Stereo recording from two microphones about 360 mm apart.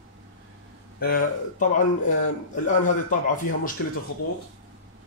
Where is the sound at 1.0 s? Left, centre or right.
Left.